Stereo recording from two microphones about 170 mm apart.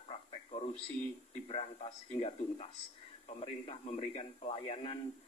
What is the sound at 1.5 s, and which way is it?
A man's voice, 35° left (ahead or behind).